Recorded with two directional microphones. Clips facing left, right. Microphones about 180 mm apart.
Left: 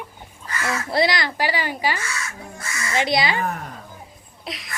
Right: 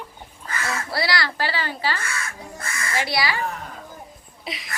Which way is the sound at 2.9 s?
20° left (ahead or behind).